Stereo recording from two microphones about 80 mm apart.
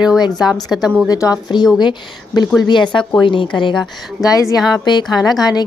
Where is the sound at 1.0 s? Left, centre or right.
Left.